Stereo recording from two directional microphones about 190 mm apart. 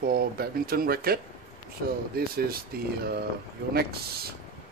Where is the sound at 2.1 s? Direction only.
50° right (ahead or behind).